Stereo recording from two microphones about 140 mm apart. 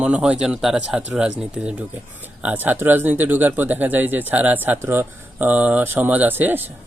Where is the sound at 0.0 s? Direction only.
10° right (ahead or behind).